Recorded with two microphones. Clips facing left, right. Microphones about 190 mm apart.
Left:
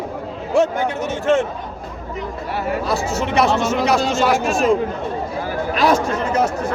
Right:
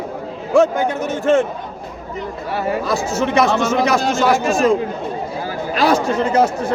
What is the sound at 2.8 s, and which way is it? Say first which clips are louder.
Speech: right 2 dB; 45° right (ahead or behind).